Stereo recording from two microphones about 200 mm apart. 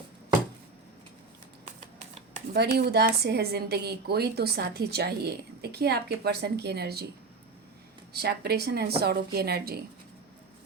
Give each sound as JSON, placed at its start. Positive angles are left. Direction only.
{"t": 2.5, "sound": "a woman's voice", "side_deg": -55}
{"t": 8.1, "sound": "a woman's voice", "side_deg": -55}